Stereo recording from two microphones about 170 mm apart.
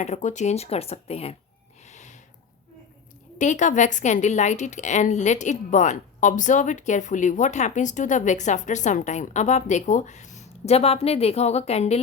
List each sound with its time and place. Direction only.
0.0 s speech: 45° left (ahead or behind)
1.9 s snort: 45° left (ahead or behind)
3.3 s a woman's voice: 45° left (ahead or behind)